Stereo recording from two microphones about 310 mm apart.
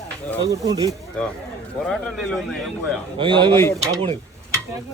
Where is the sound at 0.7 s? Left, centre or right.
Centre.